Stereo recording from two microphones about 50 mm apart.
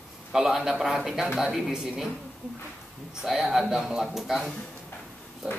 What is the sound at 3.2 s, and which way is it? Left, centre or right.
A man's voice, centre.